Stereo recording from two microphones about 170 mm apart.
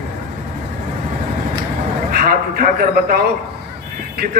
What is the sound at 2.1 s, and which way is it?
A man's voice, 55° right (ahead or behind).